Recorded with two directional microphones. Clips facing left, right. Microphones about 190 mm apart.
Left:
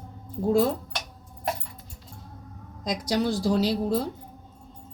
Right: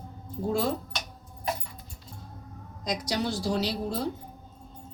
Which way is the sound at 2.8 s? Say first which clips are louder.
Left 4 dB; 50° left (ahead or behind).